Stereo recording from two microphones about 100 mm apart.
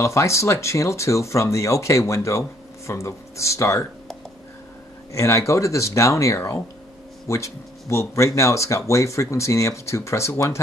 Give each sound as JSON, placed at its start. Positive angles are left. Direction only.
{"t": 0.0, "sound": "speech", "side_deg": 30}
{"t": 5.1, "sound": "speech", "side_deg": 30}